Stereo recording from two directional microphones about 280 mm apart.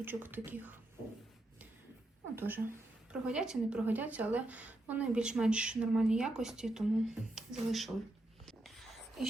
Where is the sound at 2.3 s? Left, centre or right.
Centre.